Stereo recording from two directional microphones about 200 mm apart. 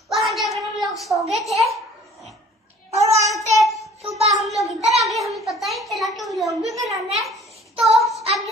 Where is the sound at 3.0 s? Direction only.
15° right (ahead or behind).